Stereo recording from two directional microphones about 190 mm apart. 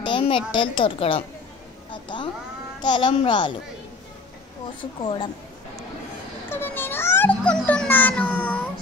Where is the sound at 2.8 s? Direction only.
25° left (ahead or behind).